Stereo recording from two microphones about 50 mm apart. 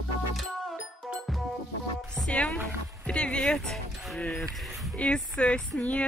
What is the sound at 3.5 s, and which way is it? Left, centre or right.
Speech, centre.